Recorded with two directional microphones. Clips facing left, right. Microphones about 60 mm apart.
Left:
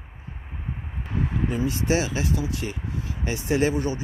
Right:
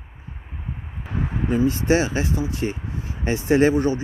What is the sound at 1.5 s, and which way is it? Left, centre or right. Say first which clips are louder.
Speech: right 7 dB; right.